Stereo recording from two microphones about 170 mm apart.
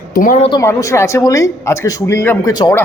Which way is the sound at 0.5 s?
20° left (ahead or behind).